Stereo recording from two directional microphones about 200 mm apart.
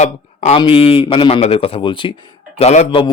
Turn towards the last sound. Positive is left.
turn(degrees=25)  # may be behind; listen again after turning